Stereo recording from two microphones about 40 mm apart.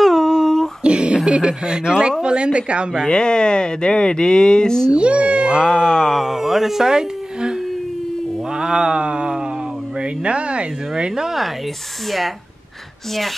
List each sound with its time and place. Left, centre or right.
0.0 s a sound: centre
0.8 s speech: right
3.1 s speech: left
4.9 s speech: right
5.9 s speech: centre
8.5 s speech: right